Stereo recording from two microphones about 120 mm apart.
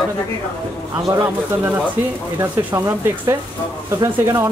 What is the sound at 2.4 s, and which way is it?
Speech, 15° right (ahead or behind).